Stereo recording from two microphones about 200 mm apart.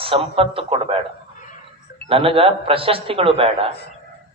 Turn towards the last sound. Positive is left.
turn(degrees=-30)  # may be behind; listen again after turning